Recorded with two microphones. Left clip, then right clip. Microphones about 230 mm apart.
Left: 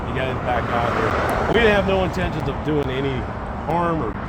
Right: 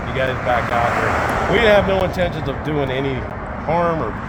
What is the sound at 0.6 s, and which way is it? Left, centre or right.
Speech, right.